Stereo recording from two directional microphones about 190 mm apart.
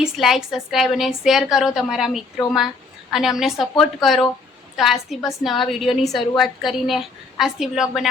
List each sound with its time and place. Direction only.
0.0 s a woman's voice: centre (ahead or behind)